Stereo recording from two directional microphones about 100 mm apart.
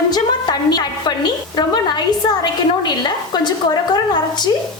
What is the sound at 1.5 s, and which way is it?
Speech, 45° left (ahead or behind).